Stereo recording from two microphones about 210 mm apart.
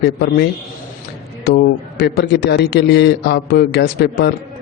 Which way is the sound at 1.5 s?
50° left (ahead or behind).